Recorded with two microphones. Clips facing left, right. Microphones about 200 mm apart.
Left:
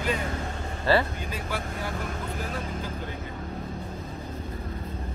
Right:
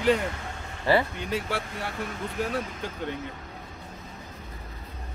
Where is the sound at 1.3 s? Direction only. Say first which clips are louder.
Right 3 dB; 70° right (ahead or behind).